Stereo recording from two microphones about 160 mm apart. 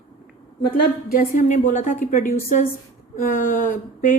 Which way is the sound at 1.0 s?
60° left (ahead or behind).